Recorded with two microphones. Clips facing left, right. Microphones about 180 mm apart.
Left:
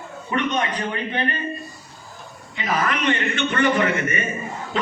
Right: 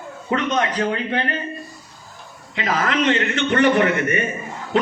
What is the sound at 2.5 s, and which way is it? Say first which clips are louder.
A man's voice: right 2 dB; 90° right.